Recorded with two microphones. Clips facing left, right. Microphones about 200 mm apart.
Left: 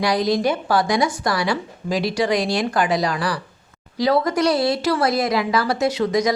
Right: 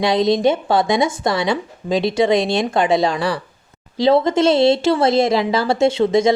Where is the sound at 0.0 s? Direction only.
25° right (ahead or behind).